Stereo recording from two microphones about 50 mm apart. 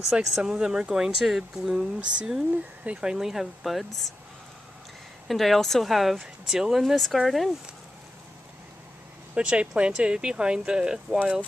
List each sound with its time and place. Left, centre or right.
0.1 s speech: centre
2.0 s speech: right
3.0 s speech: centre
5.3 s speech: centre
9.3 s speech: right